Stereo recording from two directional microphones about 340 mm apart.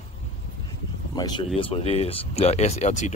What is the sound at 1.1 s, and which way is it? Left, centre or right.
Speech, centre.